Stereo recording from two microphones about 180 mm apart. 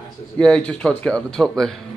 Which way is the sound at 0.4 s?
5° left (ahead or behind).